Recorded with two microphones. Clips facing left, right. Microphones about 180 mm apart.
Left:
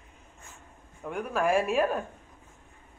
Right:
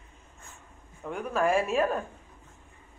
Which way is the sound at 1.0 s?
10° left (ahead or behind).